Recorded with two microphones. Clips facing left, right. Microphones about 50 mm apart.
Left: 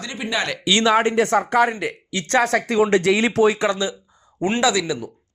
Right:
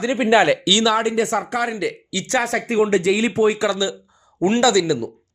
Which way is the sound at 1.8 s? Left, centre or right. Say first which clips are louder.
Right 2 dB; left.